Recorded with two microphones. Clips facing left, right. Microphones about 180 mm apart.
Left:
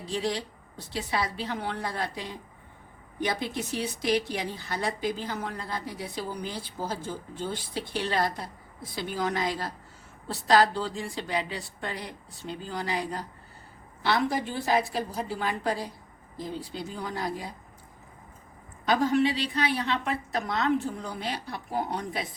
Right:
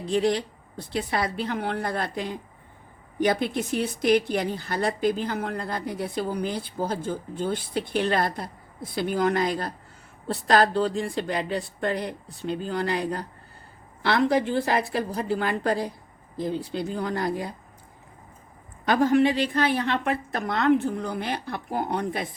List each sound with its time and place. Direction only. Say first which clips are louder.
0.1 s speech: right 7 dB; 55° right (ahead or behind)
18.9 s speech: right 4 dB; 55° right (ahead or behind)